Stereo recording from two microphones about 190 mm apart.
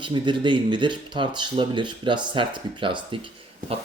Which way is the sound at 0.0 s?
25° right (ahead or behind).